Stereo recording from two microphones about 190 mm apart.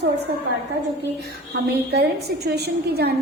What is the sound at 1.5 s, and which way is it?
A woman's voice, 60° right (ahead or behind).